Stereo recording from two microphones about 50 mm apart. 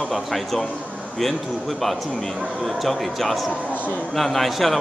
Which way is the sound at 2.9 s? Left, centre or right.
Centre.